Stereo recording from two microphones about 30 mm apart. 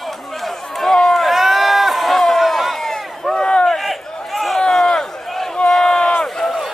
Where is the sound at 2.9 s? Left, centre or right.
Centre.